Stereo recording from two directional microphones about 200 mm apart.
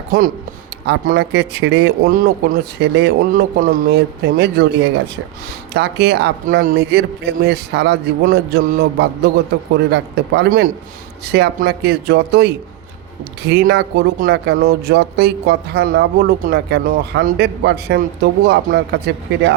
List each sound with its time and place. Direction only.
0.9 s speech: 55° right (ahead or behind)